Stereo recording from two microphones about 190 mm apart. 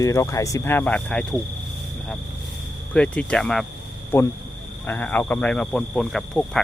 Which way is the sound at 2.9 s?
5° left (ahead or behind).